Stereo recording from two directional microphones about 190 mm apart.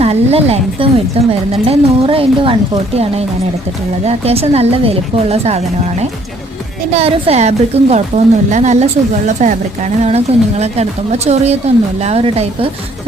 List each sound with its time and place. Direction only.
0.0 s a woman's voice: 35° right (ahead or behind)